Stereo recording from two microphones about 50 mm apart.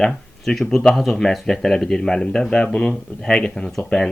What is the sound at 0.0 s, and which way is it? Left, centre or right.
Speech, centre.